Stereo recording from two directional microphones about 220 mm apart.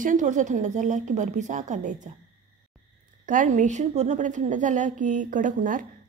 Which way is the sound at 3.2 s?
35° right (ahead or behind).